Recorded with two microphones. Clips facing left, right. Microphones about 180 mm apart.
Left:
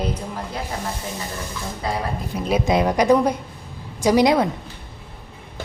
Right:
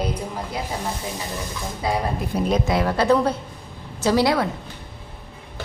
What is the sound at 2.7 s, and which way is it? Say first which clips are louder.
A woman's voice: left 4 dB; 20° left (ahead or behind).